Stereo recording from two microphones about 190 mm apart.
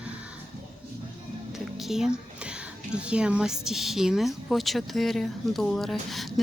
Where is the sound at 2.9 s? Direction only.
5° right (ahead or behind).